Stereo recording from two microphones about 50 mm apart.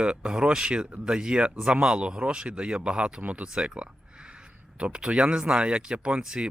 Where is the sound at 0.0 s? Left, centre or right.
Right.